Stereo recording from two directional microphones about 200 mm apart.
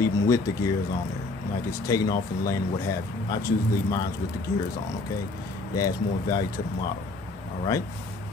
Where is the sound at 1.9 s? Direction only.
20° left (ahead or behind).